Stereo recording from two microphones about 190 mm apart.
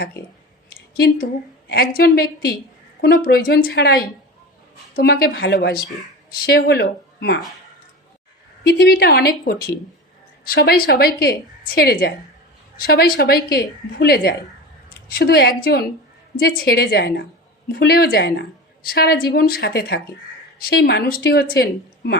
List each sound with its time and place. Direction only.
0.9 s a woman's voice: 55° left (ahead or behind)
8.6 s a woman's voice: 55° left (ahead or behind)